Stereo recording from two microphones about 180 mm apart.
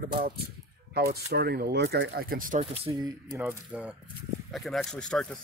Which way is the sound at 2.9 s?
20° right (ahead or behind).